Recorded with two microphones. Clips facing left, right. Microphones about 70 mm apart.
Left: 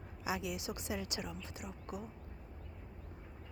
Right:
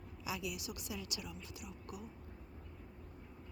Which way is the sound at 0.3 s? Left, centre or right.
Left.